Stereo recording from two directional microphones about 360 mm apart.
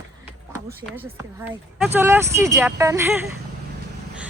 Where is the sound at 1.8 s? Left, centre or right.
Centre.